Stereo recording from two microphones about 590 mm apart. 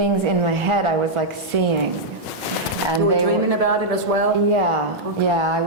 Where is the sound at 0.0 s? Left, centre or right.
Right.